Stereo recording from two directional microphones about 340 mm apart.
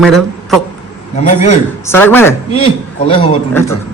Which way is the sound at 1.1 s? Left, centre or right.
Left.